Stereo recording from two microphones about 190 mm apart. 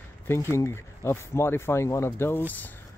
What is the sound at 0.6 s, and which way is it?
Speech, 15° left (ahead or behind).